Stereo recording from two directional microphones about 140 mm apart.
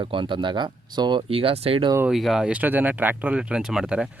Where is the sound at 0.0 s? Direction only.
35° right (ahead or behind).